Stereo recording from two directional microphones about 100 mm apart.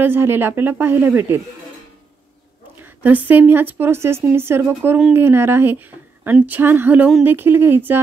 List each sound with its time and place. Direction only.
0.0 s a woman's voice: 20° right (ahead or behind)
2.8 s a woman's voice: 15° right (ahead or behind)